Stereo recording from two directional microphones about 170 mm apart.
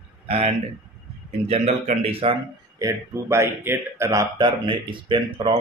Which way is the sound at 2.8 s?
15° right (ahead or behind).